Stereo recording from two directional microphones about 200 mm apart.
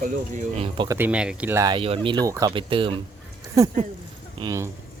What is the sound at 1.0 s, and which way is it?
Speech, 5° right (ahead or behind).